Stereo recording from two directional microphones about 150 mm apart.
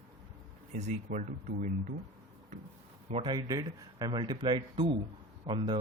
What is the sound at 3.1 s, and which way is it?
Speech, 35° right (ahead or behind).